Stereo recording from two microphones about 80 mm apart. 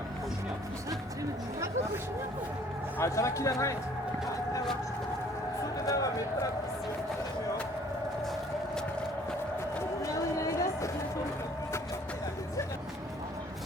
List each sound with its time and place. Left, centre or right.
3.0 s speech: left
5.8 s speech: left
10.0 s a sound: left